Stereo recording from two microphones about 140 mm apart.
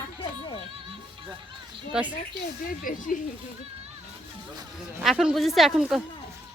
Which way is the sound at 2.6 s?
80° left.